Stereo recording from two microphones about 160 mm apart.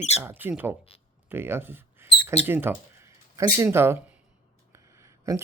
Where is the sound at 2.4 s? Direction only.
15° right (ahead or behind).